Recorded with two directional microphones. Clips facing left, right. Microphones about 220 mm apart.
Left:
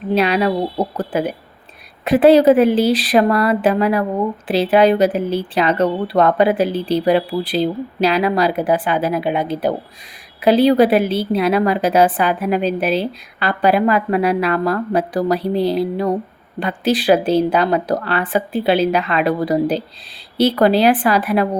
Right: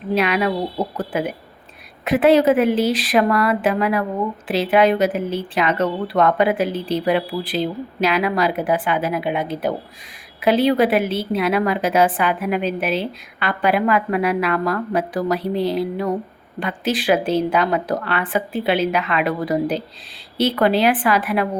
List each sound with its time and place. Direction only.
0.1 s speech: 35° left (ahead or behind)